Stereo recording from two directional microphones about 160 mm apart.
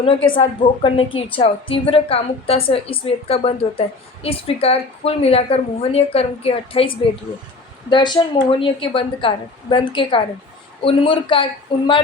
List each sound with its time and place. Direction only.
0.0 s a woman's voice: 35° left (ahead or behind)